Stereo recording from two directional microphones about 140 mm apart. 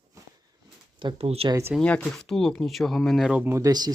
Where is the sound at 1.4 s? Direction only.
25° right (ahead or behind).